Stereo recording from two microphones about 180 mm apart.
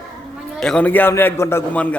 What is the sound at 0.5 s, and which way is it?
A man's voice, 5° left (ahead or behind).